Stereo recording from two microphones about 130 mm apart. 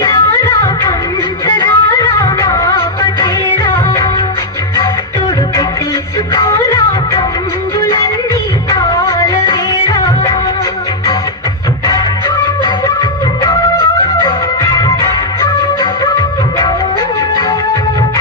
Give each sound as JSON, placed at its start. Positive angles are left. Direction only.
{"t": 0.0, "sound": "music", "side_deg": 35}
{"t": 6.3, "sound": "music", "side_deg": 25}
{"t": 9.0, "sound": "music", "side_deg": 25}
{"t": 12.6, "sound": "music", "side_deg": 25}
{"t": 14.7, "sound": "music", "side_deg": 25}